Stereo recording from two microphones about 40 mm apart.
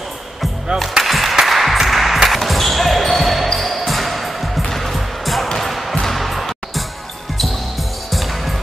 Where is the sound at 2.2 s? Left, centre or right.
Centre.